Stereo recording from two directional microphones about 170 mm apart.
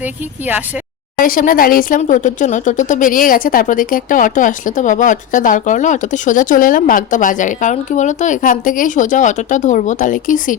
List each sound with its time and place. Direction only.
0.0 s speech: 10° right (ahead or behind)
1.2 s a woman's voice: 55° left (ahead or behind)